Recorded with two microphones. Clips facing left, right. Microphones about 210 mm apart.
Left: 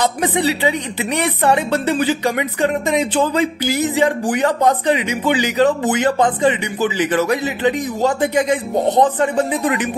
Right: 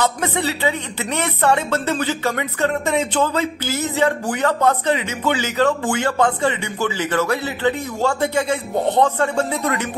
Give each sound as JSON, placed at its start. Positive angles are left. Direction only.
{"t": 0.0, "sound": "speech", "side_deg": 15}